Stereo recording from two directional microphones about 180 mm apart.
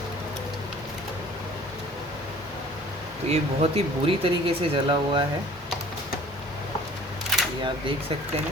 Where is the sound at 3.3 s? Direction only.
30° right (ahead or behind).